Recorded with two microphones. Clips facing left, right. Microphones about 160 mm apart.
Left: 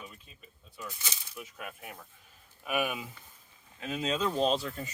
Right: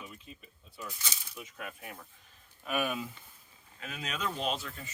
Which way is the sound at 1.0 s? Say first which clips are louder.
Left 1 dB; 5° left (ahead or behind).